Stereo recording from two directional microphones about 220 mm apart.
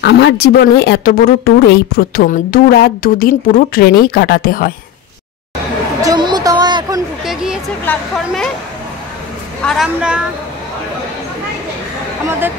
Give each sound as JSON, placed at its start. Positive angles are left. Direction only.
{"t": 0.0, "sound": "a woman's voice", "side_deg": 50}
{"t": 6.0, "sound": "a sound", "side_deg": -20}
{"t": 7.2, "sound": "a sound", "side_deg": -5}
{"t": 7.8, "sound": "speech", "side_deg": 5}
{"t": 9.6, "sound": "a woman's voice", "side_deg": 0}
{"t": 12.3, "sound": "speech", "side_deg": -10}